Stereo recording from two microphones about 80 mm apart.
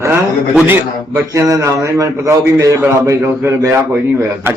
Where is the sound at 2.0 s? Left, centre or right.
Right.